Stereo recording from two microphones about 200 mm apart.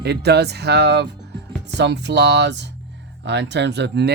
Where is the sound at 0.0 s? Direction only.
55° right (ahead or behind).